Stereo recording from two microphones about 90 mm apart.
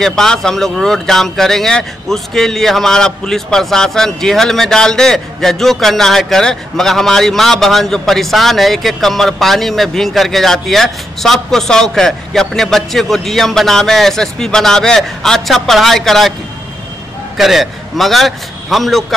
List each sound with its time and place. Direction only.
0.0 s speech: 5° left (ahead or behind)
17.4 s speech: centre (ahead or behind)